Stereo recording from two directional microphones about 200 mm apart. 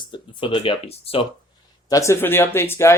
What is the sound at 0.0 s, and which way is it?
Speech, 25° left (ahead or behind).